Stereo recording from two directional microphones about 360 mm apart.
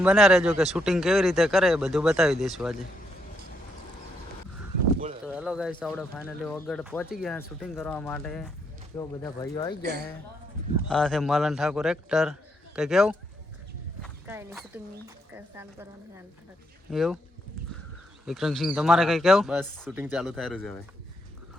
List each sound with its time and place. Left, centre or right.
0.0 s speech: centre
5.2 s speech: centre
9.8 s speech: right
10.8 s speech: centre
14.0 s a sound: centre
15.3 s speech: centre
16.9 s speech: centre
18.3 s speech: centre